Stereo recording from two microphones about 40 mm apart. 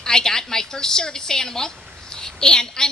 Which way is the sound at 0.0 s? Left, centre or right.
Centre.